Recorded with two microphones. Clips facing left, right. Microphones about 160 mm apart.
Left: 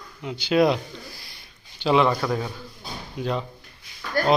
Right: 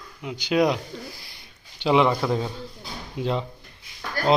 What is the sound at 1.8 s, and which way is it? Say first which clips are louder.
A man's voice: even; 15° right (ahead or behind).